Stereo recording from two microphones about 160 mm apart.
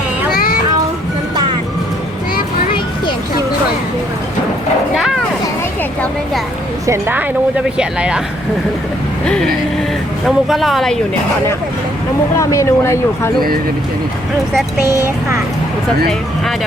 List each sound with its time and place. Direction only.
4.9 s vehicle: centre (ahead or behind)
6.8 s speech: 15° right (ahead or behind)
10.2 s speech: centre (ahead or behind)
12.4 s speech: 20° left (ahead or behind)